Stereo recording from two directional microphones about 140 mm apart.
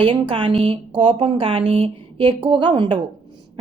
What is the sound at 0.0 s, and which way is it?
A woman's voice, 40° right (ahead or behind).